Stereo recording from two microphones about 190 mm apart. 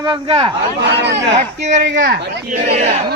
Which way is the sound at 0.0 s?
25° right (ahead or behind).